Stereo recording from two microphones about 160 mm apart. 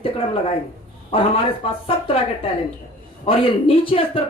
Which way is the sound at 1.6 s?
35° left (ahead or behind).